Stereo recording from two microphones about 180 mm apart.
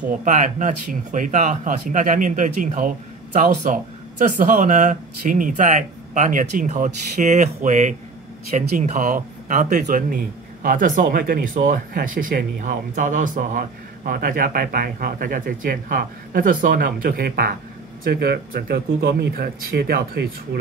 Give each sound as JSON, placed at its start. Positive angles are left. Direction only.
{"t": 0.2, "sound": "speech", "side_deg": -45}